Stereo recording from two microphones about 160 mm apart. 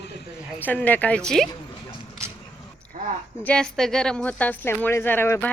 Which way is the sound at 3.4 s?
5° left (ahead or behind).